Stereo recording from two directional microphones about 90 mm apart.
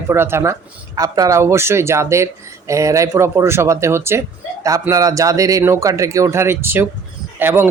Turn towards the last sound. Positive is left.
turn(degrees=-25)  # may be behind; listen again after turning